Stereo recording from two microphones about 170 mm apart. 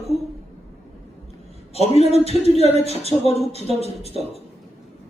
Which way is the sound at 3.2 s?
35° left (ahead or behind).